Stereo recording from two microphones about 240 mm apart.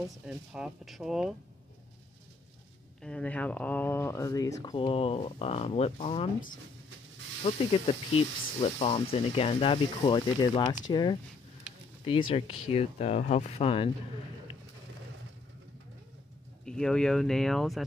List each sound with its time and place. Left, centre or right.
0.3 s speech: centre
3.0 s speech: centre; by 6.2 s left
7.4 s speech: left
16.6 s speech: centre